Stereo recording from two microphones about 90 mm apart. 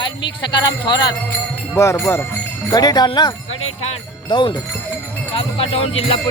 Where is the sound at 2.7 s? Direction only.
50° left (ahead or behind).